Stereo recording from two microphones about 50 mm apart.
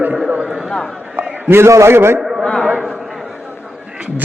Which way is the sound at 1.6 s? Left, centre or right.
Right.